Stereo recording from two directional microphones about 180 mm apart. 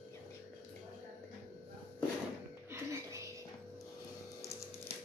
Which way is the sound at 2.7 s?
15° right (ahead or behind).